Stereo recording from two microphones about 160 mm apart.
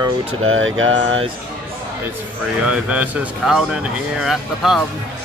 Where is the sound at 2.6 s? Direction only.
5° right (ahead or behind).